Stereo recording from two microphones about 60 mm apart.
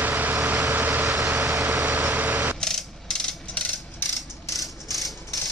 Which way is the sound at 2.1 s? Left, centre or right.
Right.